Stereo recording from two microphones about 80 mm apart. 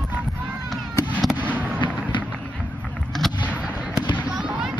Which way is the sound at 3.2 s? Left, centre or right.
Centre.